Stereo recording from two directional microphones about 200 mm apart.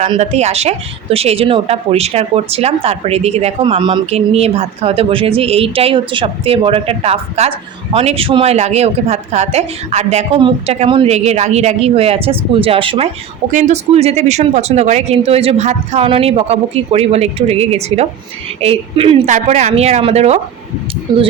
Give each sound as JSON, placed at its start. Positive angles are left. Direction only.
{"t": 0.0, "sound": "a woman's voice", "side_deg": -35}
{"t": 13.5, "sound": "a woman's voice", "side_deg": -40}
{"t": 21.1, "sound": "a woman's voice", "side_deg": -20}